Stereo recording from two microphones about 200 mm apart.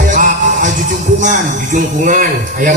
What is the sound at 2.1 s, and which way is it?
Speech, 40° right (ahead or behind).